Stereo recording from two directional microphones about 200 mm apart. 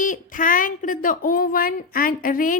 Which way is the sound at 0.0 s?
40° left (ahead or behind).